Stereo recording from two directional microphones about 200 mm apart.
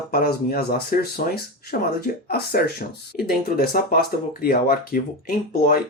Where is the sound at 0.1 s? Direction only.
50° left (ahead or behind).